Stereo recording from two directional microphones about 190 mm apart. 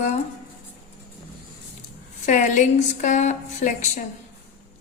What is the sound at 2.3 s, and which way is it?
A woman's voice, 40° left (ahead or behind).